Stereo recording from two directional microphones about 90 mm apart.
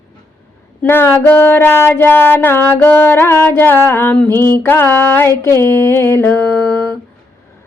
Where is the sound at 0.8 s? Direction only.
25° left (ahead or behind).